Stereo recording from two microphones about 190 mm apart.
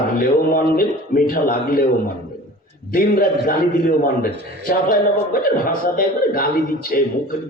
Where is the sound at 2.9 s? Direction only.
50° left (ahead or behind).